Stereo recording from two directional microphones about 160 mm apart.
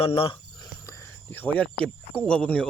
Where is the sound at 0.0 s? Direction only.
35° left (ahead or behind).